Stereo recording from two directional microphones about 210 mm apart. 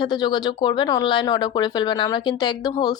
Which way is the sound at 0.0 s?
20° left (ahead or behind).